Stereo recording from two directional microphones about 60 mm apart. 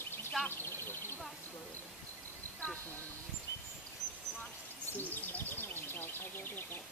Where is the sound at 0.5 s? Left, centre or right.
Left.